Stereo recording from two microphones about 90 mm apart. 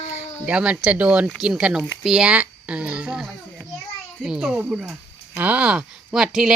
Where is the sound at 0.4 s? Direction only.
15° right (ahead or behind).